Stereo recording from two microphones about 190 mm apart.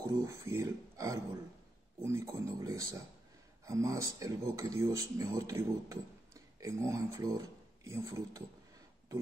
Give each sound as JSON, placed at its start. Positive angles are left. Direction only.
{"t": 0.0, "sound": "speech", "side_deg": -15}